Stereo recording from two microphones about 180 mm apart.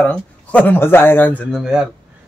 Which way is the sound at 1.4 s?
Centre (ahead or behind).